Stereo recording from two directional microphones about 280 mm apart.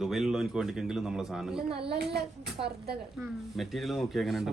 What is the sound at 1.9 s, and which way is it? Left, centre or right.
A child's voice, right.